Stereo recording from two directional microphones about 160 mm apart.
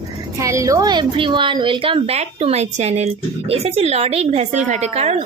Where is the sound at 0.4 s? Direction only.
20° right (ahead or behind).